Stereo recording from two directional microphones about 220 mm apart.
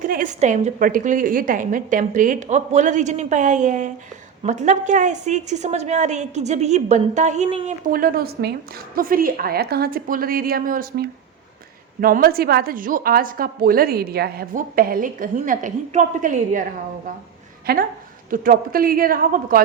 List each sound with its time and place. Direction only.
0.1 s a woman's voice: 35° right (ahead or behind)
17.7 s a woman's voice: 45° right (ahead or behind)